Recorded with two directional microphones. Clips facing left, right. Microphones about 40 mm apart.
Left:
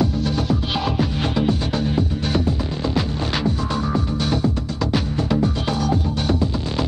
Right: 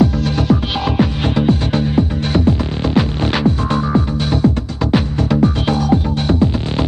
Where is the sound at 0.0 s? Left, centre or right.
Right.